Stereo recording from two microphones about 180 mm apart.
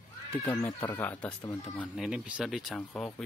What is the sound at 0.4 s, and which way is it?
Speech, 15° left (ahead or behind).